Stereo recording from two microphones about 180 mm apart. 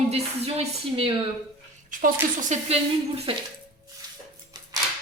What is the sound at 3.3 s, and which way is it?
Speech, 30° right (ahead or behind).